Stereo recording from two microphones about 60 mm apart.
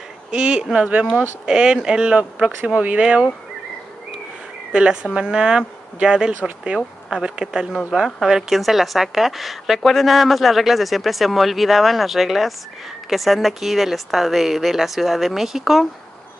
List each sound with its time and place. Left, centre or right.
0.3 s speech: centre
5.1 s a woman's voice: centre